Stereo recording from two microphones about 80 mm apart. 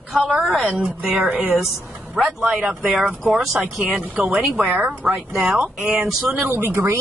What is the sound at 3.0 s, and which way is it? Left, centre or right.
Speech, centre.